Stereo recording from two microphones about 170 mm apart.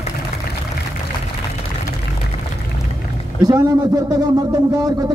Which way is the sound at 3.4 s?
20° right (ahead or behind).